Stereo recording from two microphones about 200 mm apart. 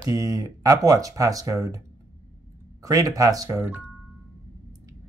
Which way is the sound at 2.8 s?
15° right (ahead or behind).